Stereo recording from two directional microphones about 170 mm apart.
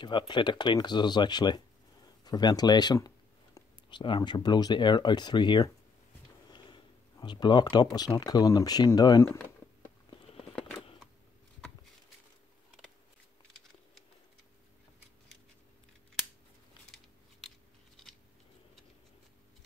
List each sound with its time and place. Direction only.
0.3 s speech: 25° left (ahead or behind)
6.5 s a sound: 25° left (ahead or behind)
7.7 s speech: 25° left (ahead or behind)